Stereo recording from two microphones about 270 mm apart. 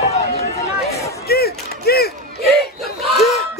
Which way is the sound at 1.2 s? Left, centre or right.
Left.